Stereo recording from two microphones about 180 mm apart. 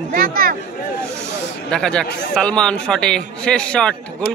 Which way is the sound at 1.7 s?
5° left (ahead or behind).